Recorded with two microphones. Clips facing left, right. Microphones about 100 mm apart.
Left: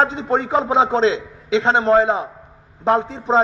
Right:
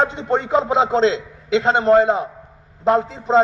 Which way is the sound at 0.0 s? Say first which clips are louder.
Left 1 dB; 5° left (ahead or behind).